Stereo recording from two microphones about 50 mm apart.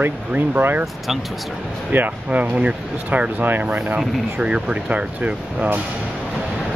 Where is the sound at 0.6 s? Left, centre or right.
Right.